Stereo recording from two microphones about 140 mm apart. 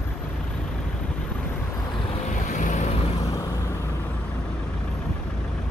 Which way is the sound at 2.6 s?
60° left (ahead or behind).